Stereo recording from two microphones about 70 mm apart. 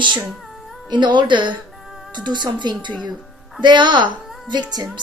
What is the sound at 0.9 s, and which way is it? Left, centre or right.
A woman's voice, right.